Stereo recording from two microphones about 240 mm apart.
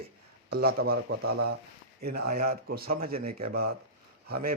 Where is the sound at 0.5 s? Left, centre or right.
Right.